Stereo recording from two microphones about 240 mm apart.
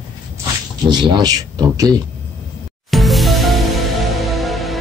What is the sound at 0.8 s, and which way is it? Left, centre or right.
Speech, centre.